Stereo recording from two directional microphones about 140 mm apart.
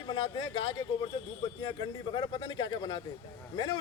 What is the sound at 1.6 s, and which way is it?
A man's voice, 30° left (ahead or behind).